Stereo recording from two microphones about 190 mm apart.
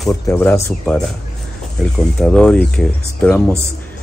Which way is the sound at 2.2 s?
5° left (ahead or behind).